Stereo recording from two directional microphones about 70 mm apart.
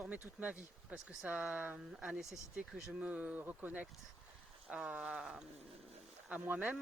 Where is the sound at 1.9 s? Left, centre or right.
Centre.